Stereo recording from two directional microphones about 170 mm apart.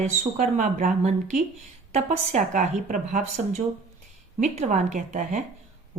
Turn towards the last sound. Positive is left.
turn(degrees=-45)  # may be behind; listen again after turning